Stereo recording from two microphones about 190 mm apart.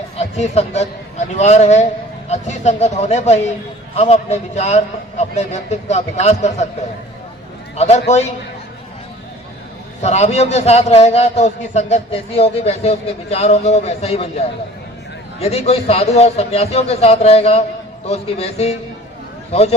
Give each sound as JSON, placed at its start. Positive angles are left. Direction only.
{"t": 0.2, "sound": "a man's voice", "side_deg": 35}
{"t": 7.8, "sound": "a man's voice", "side_deg": 35}
{"t": 10.0, "sound": "a man's voice", "side_deg": 35}